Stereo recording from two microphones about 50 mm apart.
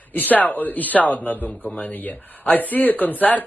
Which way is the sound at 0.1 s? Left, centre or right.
Left.